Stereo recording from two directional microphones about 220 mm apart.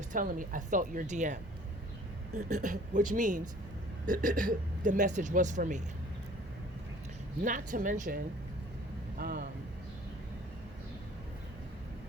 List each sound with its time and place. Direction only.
0.1 s speech: 35° right (ahead or behind)
2.6 s speech: 35° right (ahead or behind)
7.4 s speech: 35° right (ahead or behind)